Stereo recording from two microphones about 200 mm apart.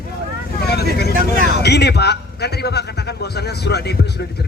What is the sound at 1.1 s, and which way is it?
Speech, 45° right (ahead or behind).